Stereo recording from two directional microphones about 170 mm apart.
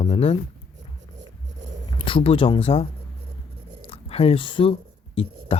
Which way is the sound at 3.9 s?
35° left (ahead or behind).